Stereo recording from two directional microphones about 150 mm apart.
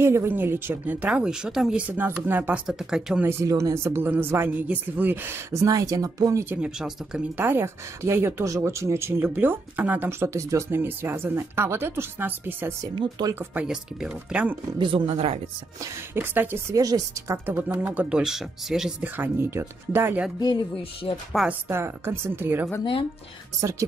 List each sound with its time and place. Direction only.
0.0 s speech: 15° right (ahead or behind)
3.3 s speech: 20° right (ahead or behind)
6.6 s speech: 5° right (ahead or behind)
12.9 s speech: 30° right (ahead or behind)
13.3 s speech: 10° right (ahead or behind)
14.8 s speech: 35° right (ahead or behind)
15.8 s speech: 15° right (ahead or behind)
18.1 s speech: 5° right (ahead or behind)
20.3 s speech: 30° left (ahead or behind)
21.5 s speech: 15° right (ahead or behind)